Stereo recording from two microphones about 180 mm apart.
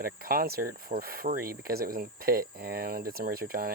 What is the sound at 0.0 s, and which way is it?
Speech, 55° right (ahead or behind).